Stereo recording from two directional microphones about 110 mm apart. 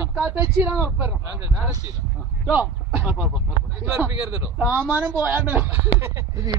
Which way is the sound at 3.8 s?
20° right (ahead or behind).